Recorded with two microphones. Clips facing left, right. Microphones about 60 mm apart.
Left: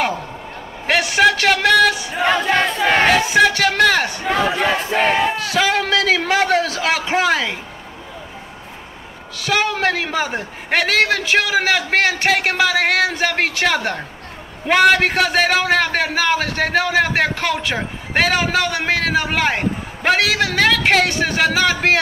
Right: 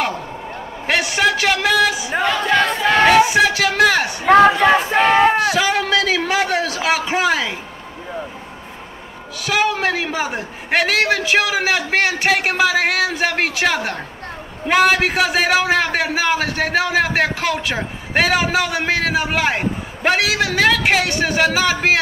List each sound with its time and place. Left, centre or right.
0.8 s a man's voice: centre
2.2 s crowd: left
3.1 s a man's voice: centre
4.7 s battle cry: right
5.4 s a man's voice: centre
9.4 s a man's voice: centre